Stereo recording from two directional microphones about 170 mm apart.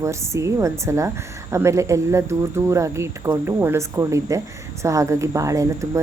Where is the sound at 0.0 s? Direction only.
15° right (ahead or behind).